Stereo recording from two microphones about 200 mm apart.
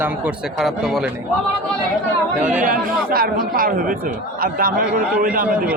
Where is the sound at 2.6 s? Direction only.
45° right (ahead or behind).